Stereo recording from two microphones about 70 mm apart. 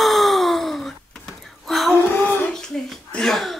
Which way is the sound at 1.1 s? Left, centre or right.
Centre.